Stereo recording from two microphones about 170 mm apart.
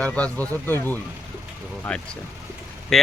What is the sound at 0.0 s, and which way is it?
Speech, 10° left (ahead or behind).